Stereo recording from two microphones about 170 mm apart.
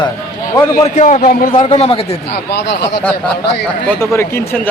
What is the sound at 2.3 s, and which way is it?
Speech, 75° left (ahead or behind).